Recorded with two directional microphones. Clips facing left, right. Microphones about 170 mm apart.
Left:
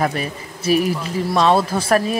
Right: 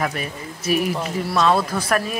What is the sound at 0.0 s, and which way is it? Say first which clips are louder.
Speech: left 4 dB; 35° left (ahead or behind).